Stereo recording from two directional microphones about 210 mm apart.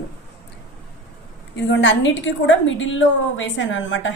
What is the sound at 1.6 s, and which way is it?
A woman's voice, 60° left (ahead or behind).